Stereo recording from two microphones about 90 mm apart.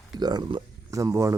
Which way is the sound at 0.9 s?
35° right (ahead or behind).